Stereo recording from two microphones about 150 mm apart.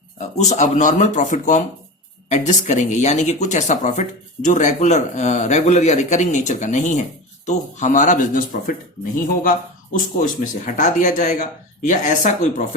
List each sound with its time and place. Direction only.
0.2 s speech: 55° left (ahead or behind)